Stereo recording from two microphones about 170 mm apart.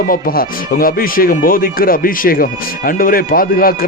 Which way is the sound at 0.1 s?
60° left (ahead or behind).